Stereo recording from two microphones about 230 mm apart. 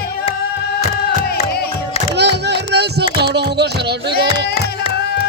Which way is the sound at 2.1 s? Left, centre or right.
Right.